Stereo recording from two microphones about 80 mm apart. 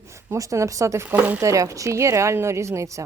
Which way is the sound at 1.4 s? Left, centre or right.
Right.